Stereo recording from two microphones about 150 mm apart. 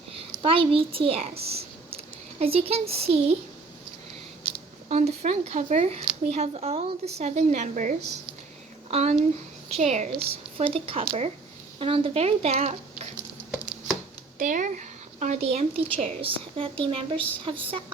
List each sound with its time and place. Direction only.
0.2 s a child's voice: 35° right (ahead or behind)
4.9 s a woman's voice: 45° right (ahead or behind)
14.3 s a woman's voice: 60° right (ahead or behind); by 17.7 s 35° right (ahead or behind)